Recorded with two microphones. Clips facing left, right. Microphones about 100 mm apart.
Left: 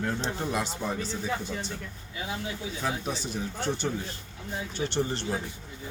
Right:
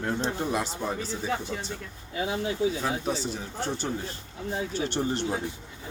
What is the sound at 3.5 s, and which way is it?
Speech, 35° right (ahead or behind).